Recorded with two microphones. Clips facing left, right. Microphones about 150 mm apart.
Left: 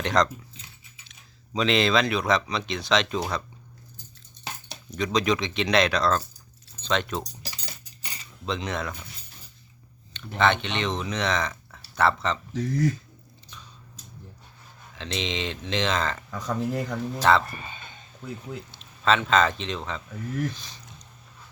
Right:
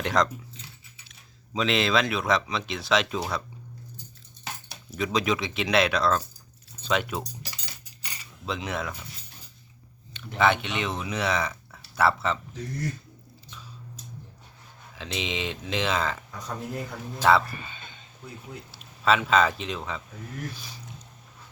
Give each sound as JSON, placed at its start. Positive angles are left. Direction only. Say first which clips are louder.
{"t": 0.0, "sound": "speech", "louder": "left 1 dB", "side_deg": -5}
{"t": 1.5, "sound": "speech", "louder": "left 2 dB", "side_deg": 0}
{"t": 4.7, "sound": "speech", "louder": "left 1 dB", "side_deg": -5}
{"t": 8.4, "sound": "speech", "louder": "left 1 dB", "side_deg": -5}
{"t": 10.1, "sound": "speech", "louder": "even", "side_deg": -5}
{"t": 12.5, "sound": "speech", "louder": "left 8 dB", "side_deg": 90}
{"t": 14.9, "sound": "speech", "louder": "left 1 dB", "side_deg": -5}
{"t": 16.3, "sound": "speech", "louder": "left 6 dB", "side_deg": 90}
{"t": 17.2, "sound": "speech", "louder": "even", "side_deg": -5}
{"t": 18.7, "sound": "speech", "louder": "even", "side_deg": -5}